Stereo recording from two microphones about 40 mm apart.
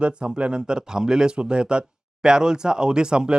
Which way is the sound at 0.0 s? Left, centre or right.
Right.